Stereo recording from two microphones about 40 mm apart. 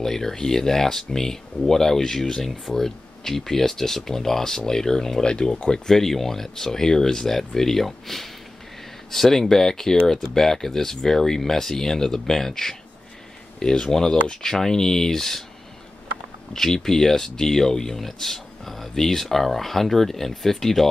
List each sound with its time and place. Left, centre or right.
0.0 s speech: centre
16.5 s speech: centre